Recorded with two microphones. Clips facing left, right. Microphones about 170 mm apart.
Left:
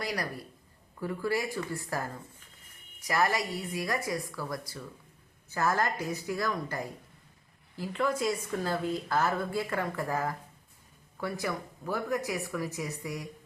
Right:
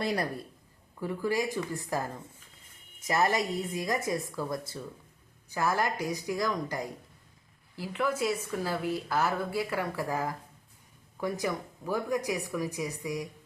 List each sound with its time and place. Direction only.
0.0 s a woman's voice: 25° right (ahead or behind)
0.9 s a woman's voice: 15° right (ahead or behind)
5.5 s speech: 15° right (ahead or behind)